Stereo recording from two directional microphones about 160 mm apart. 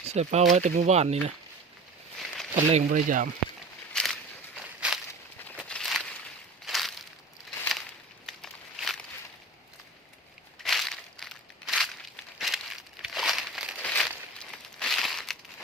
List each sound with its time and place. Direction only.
0.0 s speech: 40° right (ahead or behind)
2.1 s a sound: centre (ahead or behind)
2.6 s speech: 45° right (ahead or behind)
3.9 s walk: 5° left (ahead or behind)
5.5 s a sound: 5° left (ahead or behind)
8.3 s walk: centre (ahead or behind)
10.6 s crushing: centre (ahead or behind)
13.8 s a sound: 10° left (ahead or behind)
14.3 s crumpling: 5° left (ahead or behind)